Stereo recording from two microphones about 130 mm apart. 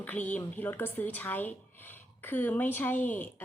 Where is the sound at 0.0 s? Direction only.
10° left (ahead or behind).